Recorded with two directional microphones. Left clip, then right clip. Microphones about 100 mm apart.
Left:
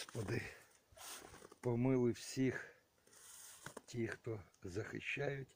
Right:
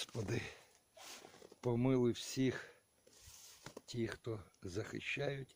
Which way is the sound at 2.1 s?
45° right (ahead or behind).